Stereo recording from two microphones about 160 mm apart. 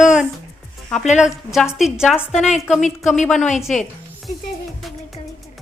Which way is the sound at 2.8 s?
50° left (ahead or behind).